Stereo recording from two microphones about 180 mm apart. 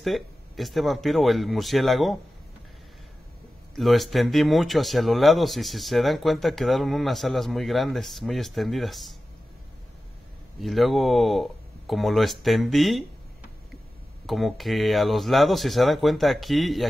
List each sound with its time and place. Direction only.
0.0 s speech: centre (ahead or behind)
3.7 s speech: centre (ahead or behind)
10.6 s speech: centre (ahead or behind)
14.2 s speech: centre (ahead or behind)